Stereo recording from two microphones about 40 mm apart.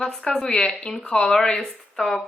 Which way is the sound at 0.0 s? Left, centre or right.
Centre.